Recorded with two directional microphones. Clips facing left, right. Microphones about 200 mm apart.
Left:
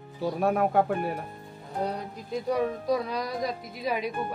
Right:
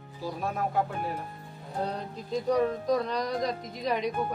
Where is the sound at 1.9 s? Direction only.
10° left (ahead or behind).